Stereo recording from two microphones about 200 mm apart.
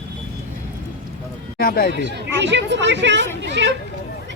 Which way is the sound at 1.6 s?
50° left (ahead or behind).